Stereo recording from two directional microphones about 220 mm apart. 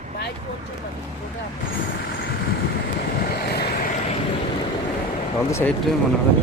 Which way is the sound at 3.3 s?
45° left (ahead or behind).